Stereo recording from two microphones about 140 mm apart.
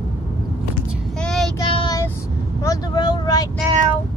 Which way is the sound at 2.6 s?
25° left (ahead or behind).